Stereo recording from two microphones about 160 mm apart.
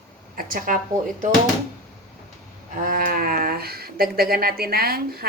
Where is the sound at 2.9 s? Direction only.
60° right (ahead or behind).